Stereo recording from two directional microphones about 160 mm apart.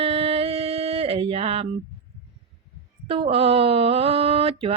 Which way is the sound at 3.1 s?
35° right (ahead or behind).